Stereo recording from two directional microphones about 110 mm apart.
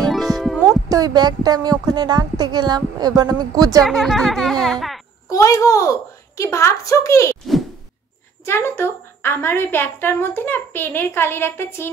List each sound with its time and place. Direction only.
0.0 s music: centre (ahead or behind)
0.8 s a woman's voice: 35° right (ahead or behind)
3.8 s a child's voice: centre (ahead or behind)
5.3 s a woman's voice: 30° left (ahead or behind)
8.5 s a woman's voice: 20° left (ahead or behind)